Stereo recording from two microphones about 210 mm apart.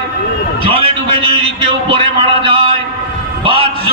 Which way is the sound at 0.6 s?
25° right (ahead or behind).